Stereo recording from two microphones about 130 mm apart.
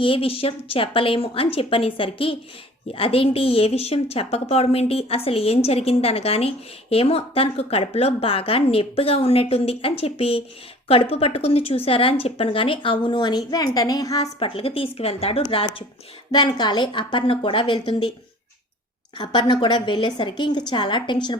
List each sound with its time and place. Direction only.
0.0 s a woman's voice: 45° left (ahead or behind); by 14.3 s 30° left (ahead or behind)
14.3 s a woman's voice: 45° left (ahead or behind)
15.4 s a woman's voice: 35° left (ahead or behind)
19.1 s a woman's voice: 35° left (ahead or behind)